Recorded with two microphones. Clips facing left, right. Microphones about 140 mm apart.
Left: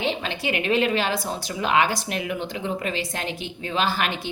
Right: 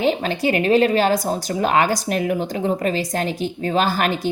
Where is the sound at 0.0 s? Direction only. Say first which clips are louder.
Right 7 dB; 40° right (ahead or behind).